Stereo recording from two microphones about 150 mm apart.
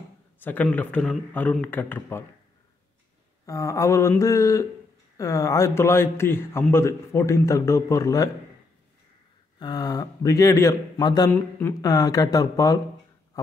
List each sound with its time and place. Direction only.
0.4 s a man's voice: 10° left (ahead or behind)
3.4 s a man's voice: 20° left (ahead or behind)
9.6 s a man's voice: 25° left (ahead or behind)